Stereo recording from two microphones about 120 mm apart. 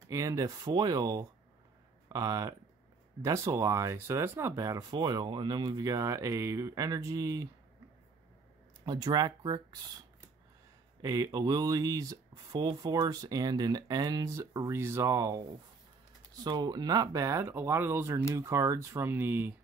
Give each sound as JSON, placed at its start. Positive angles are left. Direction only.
{"t": 0.1, "sound": "speech", "side_deg": -25}
{"t": 8.8, "sound": "speech", "side_deg": -35}
{"t": 11.0, "sound": "speech", "side_deg": -30}
{"t": 16.4, "sound": "speech", "side_deg": -35}